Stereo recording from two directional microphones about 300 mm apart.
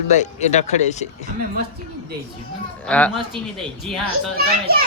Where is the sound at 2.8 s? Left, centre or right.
Centre.